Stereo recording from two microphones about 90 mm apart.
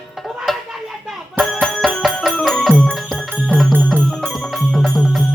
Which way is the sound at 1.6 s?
Centre (ahead or behind).